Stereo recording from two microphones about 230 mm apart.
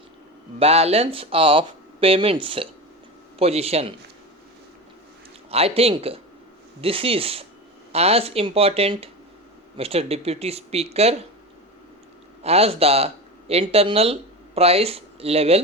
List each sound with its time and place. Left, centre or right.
0.6 s speech: right
5.5 s speech: right
12.4 s speech: right